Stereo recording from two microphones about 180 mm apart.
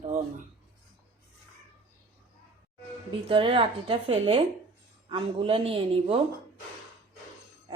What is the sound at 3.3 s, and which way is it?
A man's voice, 30° right (ahead or behind).